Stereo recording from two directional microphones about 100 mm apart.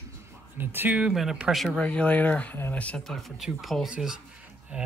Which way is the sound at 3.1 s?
Centre (ahead or behind).